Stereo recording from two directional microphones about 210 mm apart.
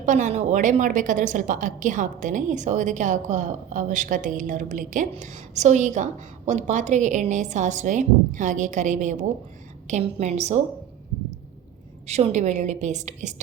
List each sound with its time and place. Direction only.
0.0 s a woman's voice: 35° right (ahead or behind)
12.0 s a woman's voice: 30° right (ahead or behind)